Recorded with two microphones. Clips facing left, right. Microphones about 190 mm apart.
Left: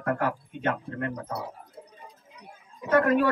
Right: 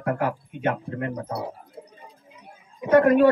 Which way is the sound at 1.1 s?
25° right (ahead or behind).